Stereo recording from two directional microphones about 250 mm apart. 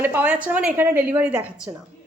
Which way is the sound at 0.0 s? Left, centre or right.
Centre.